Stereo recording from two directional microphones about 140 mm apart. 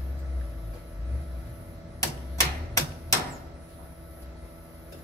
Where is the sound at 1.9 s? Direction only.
20° left (ahead or behind).